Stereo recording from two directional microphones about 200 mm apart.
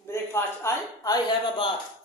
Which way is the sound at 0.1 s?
15° left (ahead or behind).